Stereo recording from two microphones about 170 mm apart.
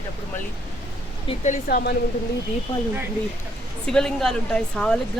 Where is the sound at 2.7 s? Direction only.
30° left (ahead or behind).